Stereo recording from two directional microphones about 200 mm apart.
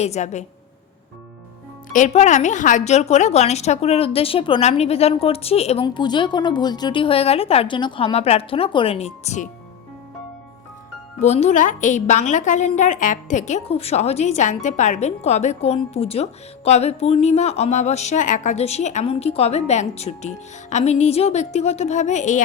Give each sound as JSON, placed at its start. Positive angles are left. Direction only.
{"t": 0.0, "sound": "a woman's voice", "side_deg": 35}
{"t": 1.9, "sound": "a woman's voice", "side_deg": 35}
{"t": 11.2, "sound": "a woman's voice", "side_deg": 35}